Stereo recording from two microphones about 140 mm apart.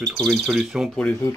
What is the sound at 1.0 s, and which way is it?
Speech, 15° left (ahead or behind).